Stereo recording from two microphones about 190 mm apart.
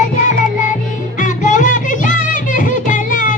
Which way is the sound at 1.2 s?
40° left (ahead or behind).